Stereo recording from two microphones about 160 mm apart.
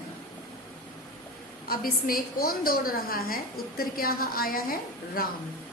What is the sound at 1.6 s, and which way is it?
A woman's voice, 65° left (ahead or behind).